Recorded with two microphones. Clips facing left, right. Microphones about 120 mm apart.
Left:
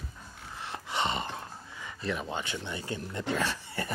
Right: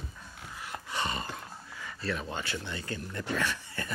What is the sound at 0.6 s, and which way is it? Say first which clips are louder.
Gasp: left 3 dB; 25° left (ahead or behind).